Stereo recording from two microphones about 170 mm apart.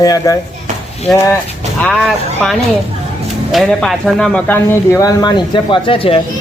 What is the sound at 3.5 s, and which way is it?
Speech, centre (ahead or behind).